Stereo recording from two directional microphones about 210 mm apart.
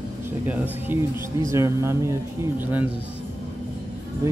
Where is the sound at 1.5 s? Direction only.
15° right (ahead or behind).